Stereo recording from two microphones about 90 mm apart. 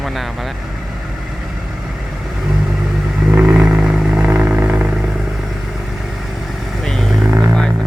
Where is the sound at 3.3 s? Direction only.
10° right (ahead or behind).